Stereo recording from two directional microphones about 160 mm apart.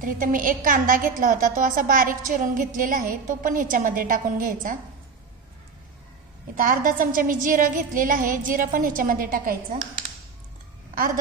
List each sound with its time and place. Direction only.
0.0 s a woman's voice: 60° right (ahead or behind)
6.5 s a woman's voice: 65° right (ahead or behind)